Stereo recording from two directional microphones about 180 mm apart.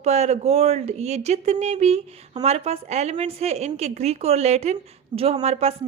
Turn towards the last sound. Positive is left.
turn(degrees=-35)  # may be behind; listen again after turning